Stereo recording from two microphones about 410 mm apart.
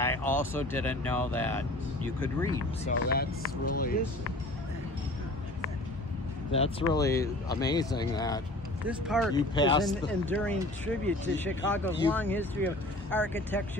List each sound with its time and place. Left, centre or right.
0.0 s speech: centre
3.1 s speech: left
6.5 s speech: centre
8.8 s speech: centre
9.3 s speech: centre